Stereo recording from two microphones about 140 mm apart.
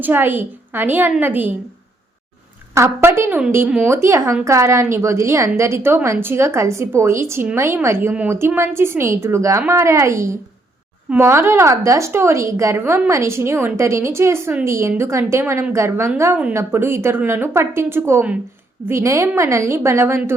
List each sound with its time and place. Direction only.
0.0 s a woman's voice: 15° right (ahead or behind)
2.7 s a woman's voice: 20° right (ahead or behind)
3.9 s a woman's voice: 20° right (ahead or behind)